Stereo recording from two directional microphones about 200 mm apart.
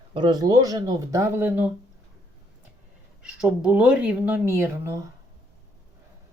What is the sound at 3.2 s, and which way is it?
Speech, 5° right (ahead or behind).